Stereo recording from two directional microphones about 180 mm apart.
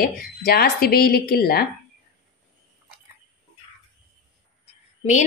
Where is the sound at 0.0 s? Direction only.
55° left (ahead or behind).